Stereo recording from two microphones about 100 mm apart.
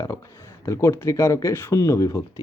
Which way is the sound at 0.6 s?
30° left (ahead or behind).